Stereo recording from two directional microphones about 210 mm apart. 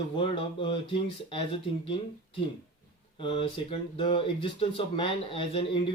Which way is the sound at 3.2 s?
25° left (ahead or behind).